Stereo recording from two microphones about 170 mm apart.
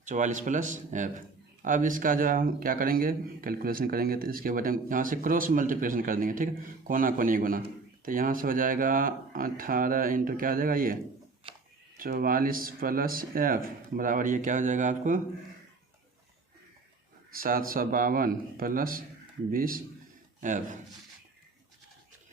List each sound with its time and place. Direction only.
0.0 s speech: 45° right (ahead or behind)
11.4 s a sound: 30° right (ahead or behind)
11.9 s speech: 60° right (ahead or behind)
17.3 s speech: 55° right (ahead or behind)